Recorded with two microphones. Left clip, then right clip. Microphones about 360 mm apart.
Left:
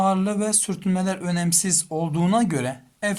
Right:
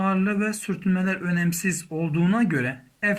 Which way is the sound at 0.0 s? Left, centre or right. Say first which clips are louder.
Left 3 dB; centre.